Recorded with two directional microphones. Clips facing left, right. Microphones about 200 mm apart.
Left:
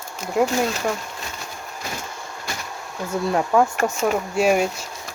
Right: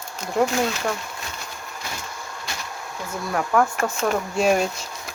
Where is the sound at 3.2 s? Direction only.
25° left (ahead or behind).